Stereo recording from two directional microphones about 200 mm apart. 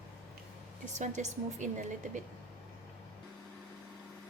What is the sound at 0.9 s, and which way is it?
A woman's voice, 35° right (ahead or behind).